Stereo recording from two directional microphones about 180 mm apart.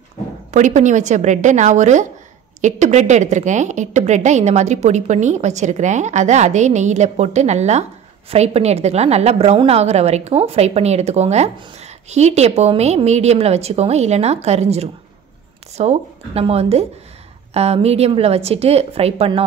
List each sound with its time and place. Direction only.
0.5 s a woman's voice: 45° right (ahead or behind)